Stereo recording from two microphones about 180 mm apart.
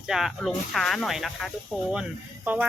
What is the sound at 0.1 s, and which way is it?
Speech, centre (ahead or behind).